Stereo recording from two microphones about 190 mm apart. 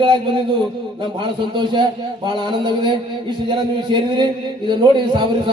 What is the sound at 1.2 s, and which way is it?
Speech, 25° right (ahead or behind).